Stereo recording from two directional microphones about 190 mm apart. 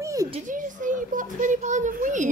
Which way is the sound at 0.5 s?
45° right (ahead or behind).